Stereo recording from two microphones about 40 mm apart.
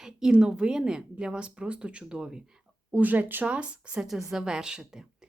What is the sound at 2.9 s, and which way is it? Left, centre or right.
Speech, right.